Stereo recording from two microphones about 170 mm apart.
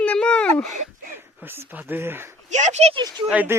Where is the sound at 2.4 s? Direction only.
45° right (ahead or behind).